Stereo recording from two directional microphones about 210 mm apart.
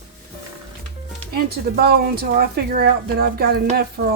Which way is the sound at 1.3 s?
50° right (ahead or behind).